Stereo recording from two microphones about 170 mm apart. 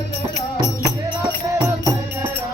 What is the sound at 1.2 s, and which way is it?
Music, 20° right (ahead or behind).